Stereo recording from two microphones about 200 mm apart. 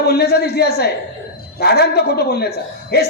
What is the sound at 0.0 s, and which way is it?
A man's voice, 55° left (ahead or behind).